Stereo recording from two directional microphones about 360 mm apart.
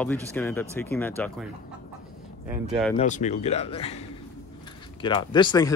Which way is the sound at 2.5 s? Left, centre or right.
Centre.